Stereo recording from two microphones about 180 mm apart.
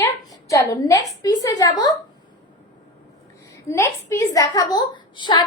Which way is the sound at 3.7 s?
15° left (ahead or behind).